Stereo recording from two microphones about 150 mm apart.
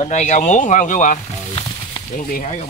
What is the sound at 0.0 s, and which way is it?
Speech, 55° left (ahead or behind).